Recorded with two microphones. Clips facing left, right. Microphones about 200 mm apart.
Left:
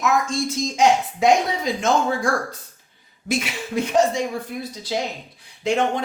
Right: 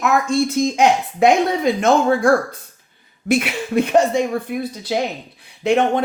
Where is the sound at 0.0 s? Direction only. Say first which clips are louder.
Right 4 dB; 60° right (ahead or behind).